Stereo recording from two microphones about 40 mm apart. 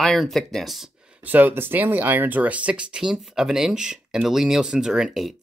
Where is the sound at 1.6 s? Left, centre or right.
Right.